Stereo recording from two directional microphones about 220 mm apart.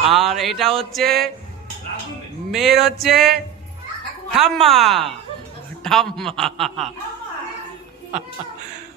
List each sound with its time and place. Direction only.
0.1 s music: centre (ahead or behind)
2.5 s a man's voice: centre (ahead or behind)
4.4 s a man's voice: centre (ahead or behind)